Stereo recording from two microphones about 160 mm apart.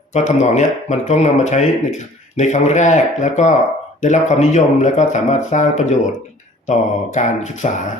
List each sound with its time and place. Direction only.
0.1 s speech: 45° left (ahead or behind)